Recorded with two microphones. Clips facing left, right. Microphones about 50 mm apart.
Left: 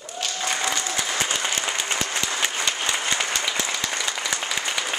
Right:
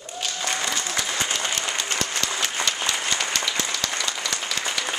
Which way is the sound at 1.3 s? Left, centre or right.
Centre.